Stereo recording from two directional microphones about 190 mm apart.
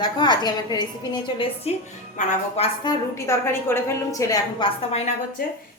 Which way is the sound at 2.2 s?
40° left (ahead or behind).